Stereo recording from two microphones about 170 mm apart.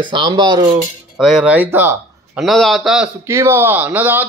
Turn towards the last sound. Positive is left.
turn(degrees=-10)  # may be behind; listen again after turning